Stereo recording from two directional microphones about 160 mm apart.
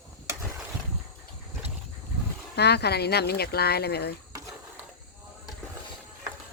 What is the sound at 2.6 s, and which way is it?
Speech, 90° left.